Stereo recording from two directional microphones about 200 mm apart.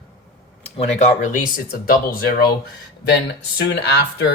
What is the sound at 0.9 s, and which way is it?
Speech, 35° left (ahead or behind).